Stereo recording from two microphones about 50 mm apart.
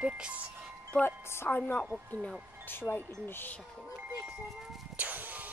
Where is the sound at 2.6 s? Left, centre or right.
Left.